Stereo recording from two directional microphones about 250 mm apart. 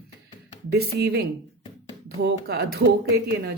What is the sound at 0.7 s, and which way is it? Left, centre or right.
Speech, right.